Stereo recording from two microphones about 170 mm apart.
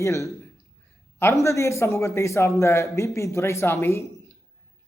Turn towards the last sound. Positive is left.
turn(degrees=15)  # may be behind; listen again after turning